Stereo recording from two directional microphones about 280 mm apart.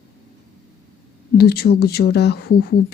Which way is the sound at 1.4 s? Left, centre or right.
Left.